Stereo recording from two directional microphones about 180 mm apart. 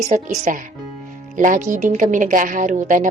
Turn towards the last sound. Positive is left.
turn(degrees=-45)  # may be behind; listen again after turning